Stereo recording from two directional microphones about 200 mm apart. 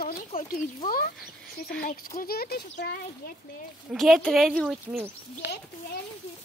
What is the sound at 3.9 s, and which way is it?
Speech, centre (ahead or behind).